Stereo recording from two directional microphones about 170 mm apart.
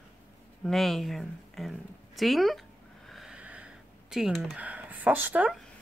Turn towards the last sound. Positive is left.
turn(degrees=-10)  # may be behind; listen again after turning